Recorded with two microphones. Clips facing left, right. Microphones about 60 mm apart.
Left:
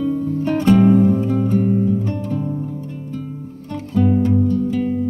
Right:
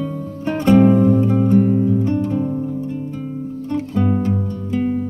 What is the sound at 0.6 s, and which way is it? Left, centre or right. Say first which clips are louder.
Music: right 1 dB; centre.